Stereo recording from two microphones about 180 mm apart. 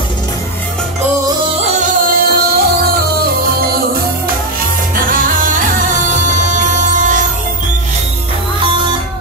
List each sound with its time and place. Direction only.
1.8 s music: 55° right (ahead or behind)